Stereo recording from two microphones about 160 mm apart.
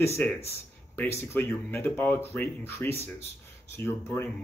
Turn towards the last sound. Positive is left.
turn(degrees=15)  # may be behind; listen again after turning